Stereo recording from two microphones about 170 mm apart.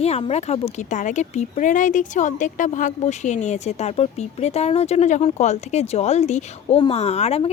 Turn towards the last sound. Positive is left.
turn(degrees=35)  # may be behind; listen again after turning